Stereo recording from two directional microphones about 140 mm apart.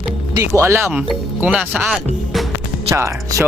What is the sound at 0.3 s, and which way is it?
Speech, 20° right (ahead or behind).